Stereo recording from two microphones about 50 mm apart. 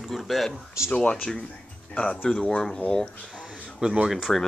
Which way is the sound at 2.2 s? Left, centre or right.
Centre.